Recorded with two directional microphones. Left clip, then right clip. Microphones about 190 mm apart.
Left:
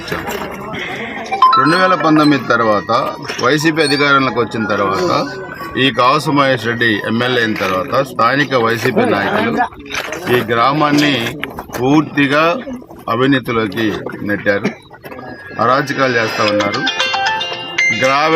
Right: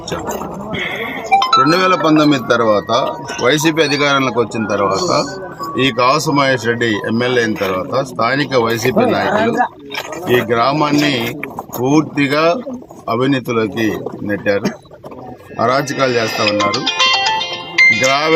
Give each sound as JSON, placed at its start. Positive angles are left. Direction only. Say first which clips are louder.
{"t": 1.4, "sound": "sheep", "louder": "left 4 dB", "side_deg": -45}
{"t": 1.6, "sound": "speech", "louder": "left 1 dB", "side_deg": 5}
{"t": 9.9, "sound": "speech", "louder": "even", "side_deg": 5}
{"t": 16.2, "sound": "music", "louder": "even", "side_deg": -20}
{"t": 18.1, "sound": "speech", "louder": "left 1 dB", "side_deg": 5}